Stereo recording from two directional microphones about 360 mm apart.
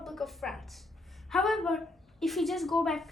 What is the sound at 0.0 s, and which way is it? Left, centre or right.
A woman's voice, centre.